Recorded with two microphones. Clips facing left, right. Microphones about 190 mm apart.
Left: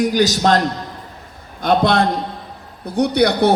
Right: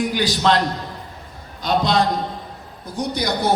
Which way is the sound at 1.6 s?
55° left (ahead or behind).